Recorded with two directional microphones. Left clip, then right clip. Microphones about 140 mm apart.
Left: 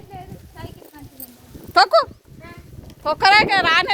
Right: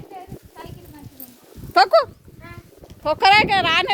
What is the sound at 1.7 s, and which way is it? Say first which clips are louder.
Speech: even; 80° right.